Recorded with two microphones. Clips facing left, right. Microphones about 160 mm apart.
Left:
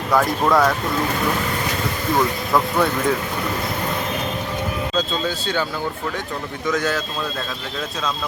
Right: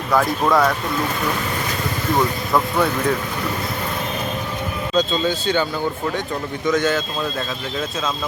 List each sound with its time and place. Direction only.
0.1 s speech: centre (ahead or behind)
2.5 s speech: centre (ahead or behind)
4.9 s speech: centre (ahead or behind)
6.7 s speech: centre (ahead or behind)